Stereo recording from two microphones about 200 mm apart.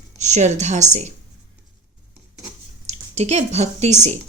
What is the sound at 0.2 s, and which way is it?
Speech, 35° right (ahead or behind).